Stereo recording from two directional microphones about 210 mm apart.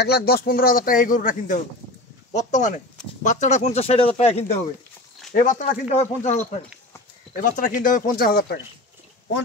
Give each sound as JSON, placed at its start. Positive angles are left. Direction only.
{"t": 0.0, "sound": "a man's voice", "side_deg": 50}
{"t": 7.4, "sound": "speech", "side_deg": 40}